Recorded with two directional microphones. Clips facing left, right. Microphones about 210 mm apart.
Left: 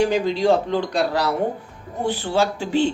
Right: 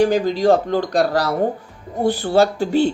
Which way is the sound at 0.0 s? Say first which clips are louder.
Right 3 dB; 45° right (ahead or behind).